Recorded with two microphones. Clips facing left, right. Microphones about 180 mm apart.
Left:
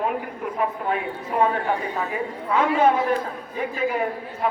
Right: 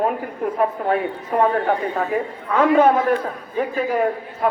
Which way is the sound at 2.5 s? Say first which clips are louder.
Right 4 dB; 55° right (ahead or behind).